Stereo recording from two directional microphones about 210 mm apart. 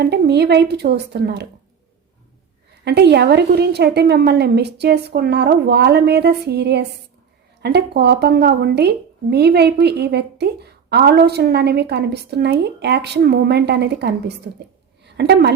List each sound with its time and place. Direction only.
0.0 s speech: 50° right (ahead or behind)
2.8 s a woman's voice: 50° right (ahead or behind)